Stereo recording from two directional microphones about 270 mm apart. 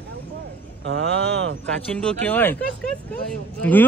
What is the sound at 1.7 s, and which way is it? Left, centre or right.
Speech, centre.